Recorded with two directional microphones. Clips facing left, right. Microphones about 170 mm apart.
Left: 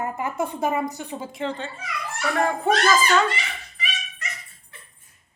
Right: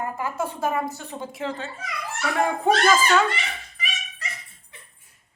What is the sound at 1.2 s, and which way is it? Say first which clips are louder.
Speech: even; 5° right (ahead or behind).